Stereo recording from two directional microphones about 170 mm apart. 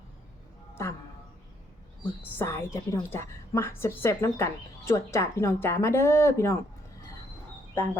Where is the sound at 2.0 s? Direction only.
15° left (ahead or behind).